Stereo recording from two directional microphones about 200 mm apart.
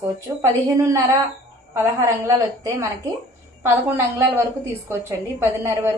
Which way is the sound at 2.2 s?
15° right (ahead or behind).